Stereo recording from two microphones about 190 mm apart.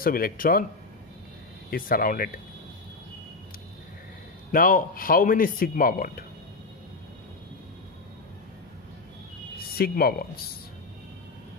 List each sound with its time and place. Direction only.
0.0 s speech: 50° left (ahead or behind)
1.7 s speech: 50° left (ahead or behind)
4.5 s speech: 45° left (ahead or behind)
9.8 s speech: 55° left (ahead or behind)